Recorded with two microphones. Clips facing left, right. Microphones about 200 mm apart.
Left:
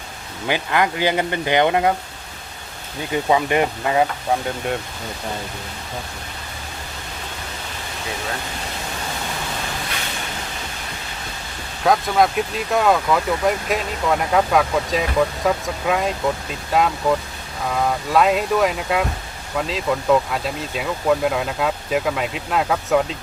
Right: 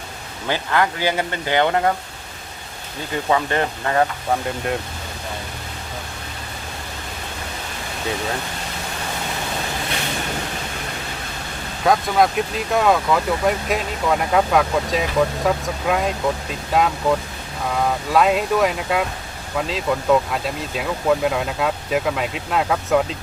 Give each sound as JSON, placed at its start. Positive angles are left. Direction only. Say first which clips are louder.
{"t": 0.4, "sound": "speech", "louder": "even", "side_deg": 15}
{"t": 3.2, "sound": "speech", "louder": "left 2 dB", "side_deg": 15}
{"t": 4.4, "sound": "speech", "louder": "even", "side_deg": 0}
{"t": 11.8, "sound": "speech", "louder": "even", "side_deg": 0}